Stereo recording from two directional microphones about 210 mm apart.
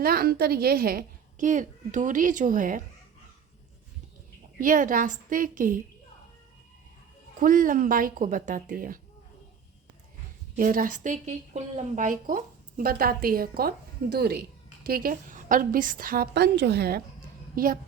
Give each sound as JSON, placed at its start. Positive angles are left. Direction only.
{"t": 0.0, "sound": "speech", "side_deg": -45}
{"t": 4.5, "sound": "speech", "side_deg": -40}
{"t": 7.3, "sound": "speech", "side_deg": -40}
{"t": 10.5, "sound": "a woman's voice", "side_deg": -40}